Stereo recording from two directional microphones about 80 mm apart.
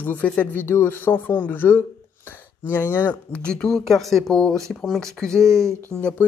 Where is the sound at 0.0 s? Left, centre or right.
Left.